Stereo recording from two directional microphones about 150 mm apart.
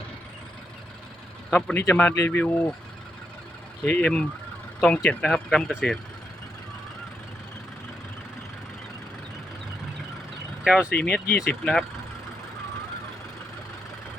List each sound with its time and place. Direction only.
1.5 s speech: 10° left (ahead or behind)
3.8 s speech: 10° left (ahead or behind)
10.6 s speech: 5° right (ahead or behind)
11.0 s speech: 15° left (ahead or behind)